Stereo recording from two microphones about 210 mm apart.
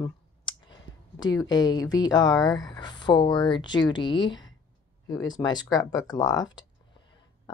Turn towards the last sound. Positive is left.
turn(degrees=20)  # may be behind; listen again after turning